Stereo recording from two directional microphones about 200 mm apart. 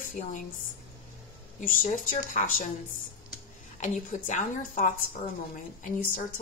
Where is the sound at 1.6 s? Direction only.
40° left (ahead or behind).